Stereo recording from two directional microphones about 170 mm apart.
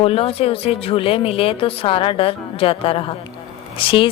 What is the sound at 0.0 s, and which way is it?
A woman's voice, 35° left (ahead or behind).